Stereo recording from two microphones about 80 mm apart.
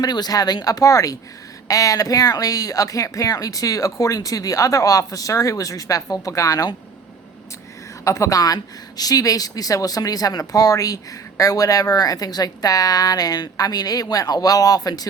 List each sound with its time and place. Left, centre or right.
0.0 s speech: left
8.0 s speech: left